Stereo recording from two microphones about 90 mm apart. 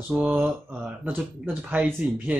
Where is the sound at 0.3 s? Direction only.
20° right (ahead or behind).